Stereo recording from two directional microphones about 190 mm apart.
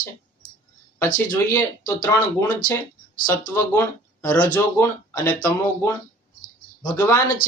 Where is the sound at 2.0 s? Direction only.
15° left (ahead or behind).